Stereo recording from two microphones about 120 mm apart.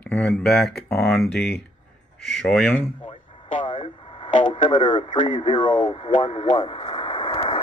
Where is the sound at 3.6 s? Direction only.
40° left (ahead or behind).